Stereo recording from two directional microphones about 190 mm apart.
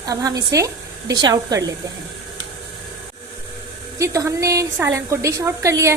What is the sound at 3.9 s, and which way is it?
A woman's voice, 15° right (ahead or behind).